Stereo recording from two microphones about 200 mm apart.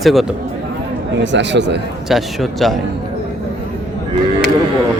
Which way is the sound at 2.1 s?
Centre (ahead or behind).